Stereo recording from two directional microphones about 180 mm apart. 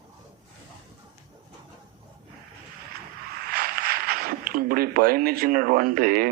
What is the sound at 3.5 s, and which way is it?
Speech, 55° right (ahead or behind).